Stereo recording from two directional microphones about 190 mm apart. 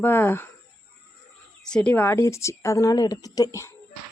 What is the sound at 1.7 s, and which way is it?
Speech, 5° left (ahead or behind).